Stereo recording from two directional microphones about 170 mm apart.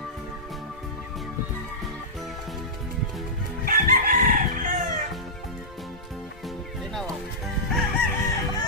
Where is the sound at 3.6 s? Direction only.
55° right (ahead or behind).